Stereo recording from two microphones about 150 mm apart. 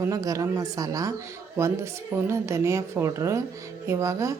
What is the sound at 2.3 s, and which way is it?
A woman's voice, 20° right (ahead or behind).